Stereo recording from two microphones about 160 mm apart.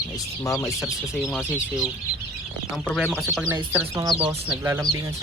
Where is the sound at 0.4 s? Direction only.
20° left (ahead or behind).